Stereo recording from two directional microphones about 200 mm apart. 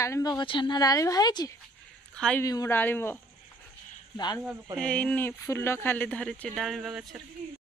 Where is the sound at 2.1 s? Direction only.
5° left (ahead or behind).